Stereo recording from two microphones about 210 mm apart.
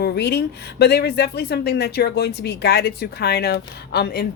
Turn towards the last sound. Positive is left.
turn(degrees=45)  # may be behind; listen again after turning